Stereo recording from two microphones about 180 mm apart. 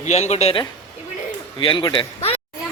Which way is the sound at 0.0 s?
40° left (ahead or behind).